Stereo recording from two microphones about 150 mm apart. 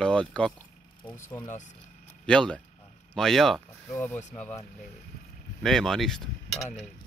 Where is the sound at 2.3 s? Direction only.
5° left (ahead or behind).